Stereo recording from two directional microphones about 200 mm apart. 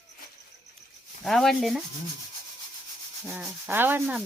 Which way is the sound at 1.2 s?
Centre (ahead or behind).